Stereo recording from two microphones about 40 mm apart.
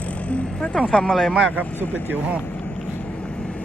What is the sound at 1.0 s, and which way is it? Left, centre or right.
Speech, centre.